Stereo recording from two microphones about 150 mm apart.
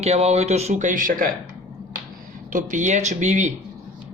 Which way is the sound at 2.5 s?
55° right (ahead or behind).